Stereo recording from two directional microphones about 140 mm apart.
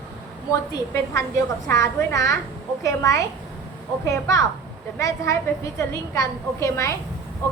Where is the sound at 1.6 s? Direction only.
20° left (ahead or behind).